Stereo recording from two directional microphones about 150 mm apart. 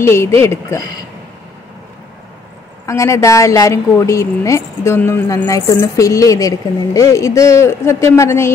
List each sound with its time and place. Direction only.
0.0 s speech: 15° left (ahead or behind)
2.9 s speech: 20° left (ahead or behind)